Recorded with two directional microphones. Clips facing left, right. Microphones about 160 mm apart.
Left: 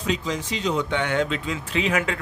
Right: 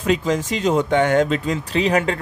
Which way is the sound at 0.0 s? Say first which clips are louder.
Right 7 dB; 50° right (ahead or behind).